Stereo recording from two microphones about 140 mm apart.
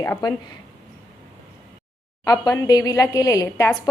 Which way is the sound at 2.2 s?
25° left (ahead or behind).